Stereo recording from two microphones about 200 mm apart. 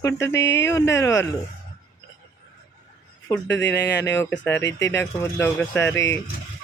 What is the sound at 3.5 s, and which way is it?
Speech, 60° left (ahead or behind).